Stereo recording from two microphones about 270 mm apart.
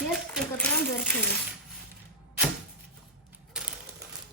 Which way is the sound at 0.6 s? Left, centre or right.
Centre.